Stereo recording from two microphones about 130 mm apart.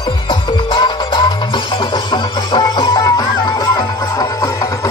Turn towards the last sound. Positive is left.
turn(degrees=30)  # may be behind; listen again after turning